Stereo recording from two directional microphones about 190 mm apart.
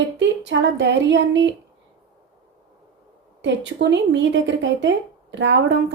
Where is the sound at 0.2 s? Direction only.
70° right (ahead or behind).